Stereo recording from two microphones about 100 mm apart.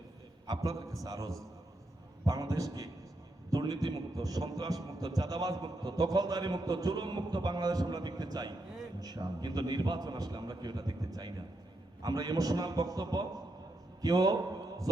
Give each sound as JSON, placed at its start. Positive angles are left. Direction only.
{"t": 0.4, "sound": "a man's voice", "side_deg": -40}